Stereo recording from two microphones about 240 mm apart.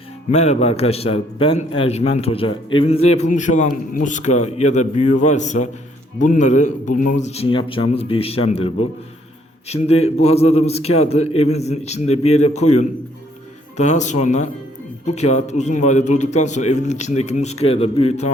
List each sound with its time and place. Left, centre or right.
0.3 s a man's voice: left
13.7 s a man's voice: left